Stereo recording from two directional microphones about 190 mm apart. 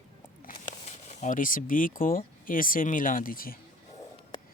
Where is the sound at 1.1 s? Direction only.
40° left (ahead or behind).